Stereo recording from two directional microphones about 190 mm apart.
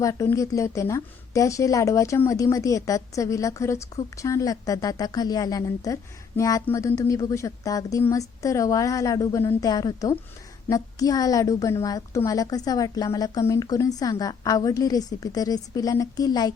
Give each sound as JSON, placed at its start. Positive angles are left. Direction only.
{"t": 0.0, "sound": "a woman's voice", "side_deg": 15}